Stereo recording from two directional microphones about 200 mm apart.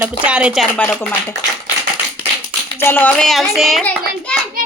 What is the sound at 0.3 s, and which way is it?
Speech, 5° right (ahead or behind).